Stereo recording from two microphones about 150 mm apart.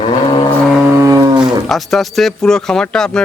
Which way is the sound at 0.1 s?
35° left (ahead or behind).